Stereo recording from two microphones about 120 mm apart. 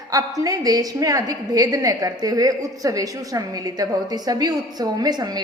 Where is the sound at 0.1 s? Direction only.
30° right (ahead or behind).